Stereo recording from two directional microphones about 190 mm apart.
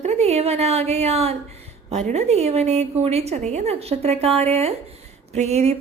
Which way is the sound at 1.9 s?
35° right (ahead or behind).